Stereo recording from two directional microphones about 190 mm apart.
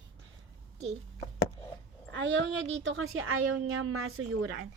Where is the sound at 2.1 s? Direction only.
80° right.